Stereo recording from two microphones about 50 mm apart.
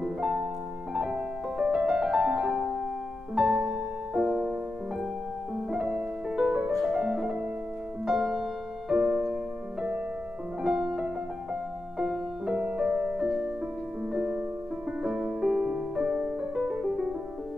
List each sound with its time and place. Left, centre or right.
0.0 s music: centre
6.3 s music: centre
8.1 s music: centre
10.6 s music: centre
14.1 s music: centre